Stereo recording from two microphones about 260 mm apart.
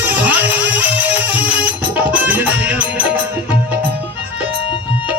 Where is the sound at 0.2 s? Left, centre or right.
Centre.